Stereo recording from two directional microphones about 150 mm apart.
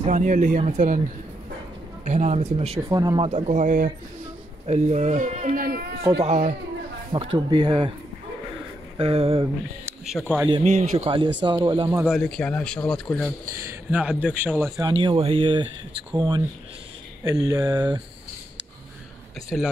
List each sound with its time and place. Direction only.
0.0 s speech: 60° right (ahead or behind)
2.0 s speech: 50° right (ahead or behind)
2.9 s speech: 25° right (ahead or behind)
3.3 s speech: 50° right (ahead or behind)
4.6 s speech: 50° right (ahead or behind); by 5.8 s 70° right (ahead or behind)
6.0 s speech: 40° right (ahead or behind)
7.1 s speech: 35° right (ahead or behind)
8.9 s speech: 40° right (ahead or behind)
10.6 s speech: 50° right (ahead or behind)
11.1 s speech: 35° right (ahead or behind)
12.1 s speech: 5° left (ahead or behind)
13.8 s a man's voice: 10° right (ahead or behind)
14.8 s speech: 35° right (ahead or behind)
19.5 s speech: 5° left (ahead or behind)